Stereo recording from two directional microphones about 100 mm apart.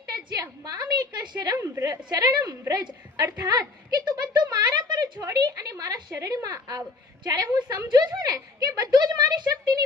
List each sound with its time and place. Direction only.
0.1 s a woman's voice: 40° right (ahead or behind)
1.5 s a woman's voice: 30° right (ahead or behind)
2.0 s a woman's voice: 40° right (ahead or behind)